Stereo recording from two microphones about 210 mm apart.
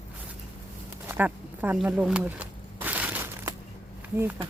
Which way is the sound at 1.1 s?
10° right (ahead or behind).